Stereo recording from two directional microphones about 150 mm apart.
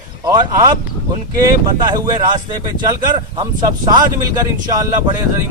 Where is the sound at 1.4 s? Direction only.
25° right (ahead or behind).